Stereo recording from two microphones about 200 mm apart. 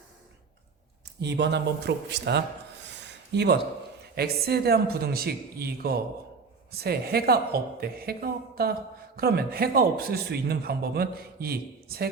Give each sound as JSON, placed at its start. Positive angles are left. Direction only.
{"t": 1.2, "sound": "speech", "side_deg": -60}
{"t": 2.8, "sound": "a sound", "side_deg": -60}
{"t": 4.1, "sound": "a man's voice", "side_deg": -50}